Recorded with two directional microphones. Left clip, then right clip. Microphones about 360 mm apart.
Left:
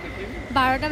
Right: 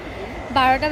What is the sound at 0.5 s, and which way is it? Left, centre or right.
Speech, centre.